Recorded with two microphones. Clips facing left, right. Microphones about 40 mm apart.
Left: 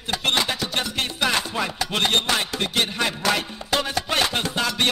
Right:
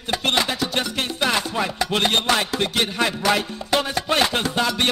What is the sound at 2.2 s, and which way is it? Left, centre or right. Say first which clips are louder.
Music: right 3 dB; right.